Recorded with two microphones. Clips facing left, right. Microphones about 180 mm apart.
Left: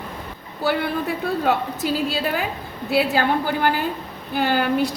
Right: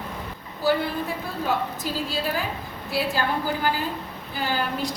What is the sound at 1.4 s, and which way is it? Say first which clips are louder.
A woman's voice: left 3 dB; 65° left (ahead or behind).